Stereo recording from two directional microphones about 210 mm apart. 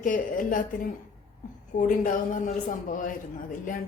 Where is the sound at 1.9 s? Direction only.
40° left (ahead or behind).